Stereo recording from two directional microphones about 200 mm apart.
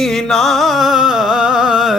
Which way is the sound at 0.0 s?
Centre (ahead or behind).